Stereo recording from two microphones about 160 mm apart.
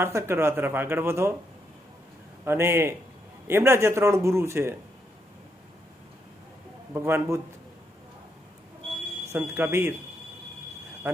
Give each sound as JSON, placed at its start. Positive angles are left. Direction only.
{"t": 0.0, "sound": "a man's voice", "side_deg": -15}
{"t": 2.4, "sound": "a man's voice", "side_deg": -15}
{"t": 6.9, "sound": "a man's voice", "side_deg": -15}
{"t": 9.3, "sound": "a man's voice", "side_deg": -15}
{"t": 11.1, "sound": "a man's voice", "side_deg": -10}